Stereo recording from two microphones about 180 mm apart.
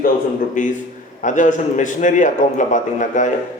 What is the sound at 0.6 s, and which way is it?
A man's voice, 45° left (ahead or behind).